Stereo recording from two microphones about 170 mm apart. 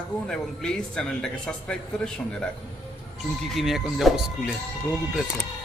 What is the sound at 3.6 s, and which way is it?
Speech, centre (ahead or behind).